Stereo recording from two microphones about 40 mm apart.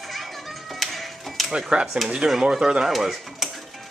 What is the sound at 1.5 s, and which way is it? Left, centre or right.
Speech, right.